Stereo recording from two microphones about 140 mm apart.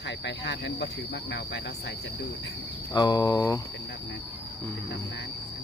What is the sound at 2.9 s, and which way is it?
Cricket, 30° left (ahead or behind).